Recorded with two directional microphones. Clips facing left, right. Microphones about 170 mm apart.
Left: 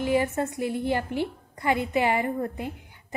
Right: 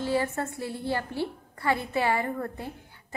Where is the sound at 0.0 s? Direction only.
15° left (ahead or behind).